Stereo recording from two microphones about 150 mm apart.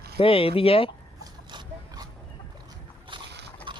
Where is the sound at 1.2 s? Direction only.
25° right (ahead or behind).